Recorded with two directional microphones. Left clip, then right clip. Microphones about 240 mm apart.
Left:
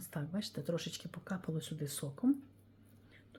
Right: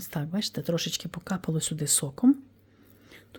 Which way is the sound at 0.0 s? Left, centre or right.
Right.